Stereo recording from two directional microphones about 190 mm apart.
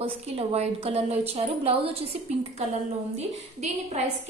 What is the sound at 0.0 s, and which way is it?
A woman's voice, 30° right (ahead or behind).